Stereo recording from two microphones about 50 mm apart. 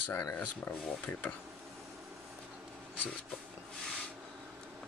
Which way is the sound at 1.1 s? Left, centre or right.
Left.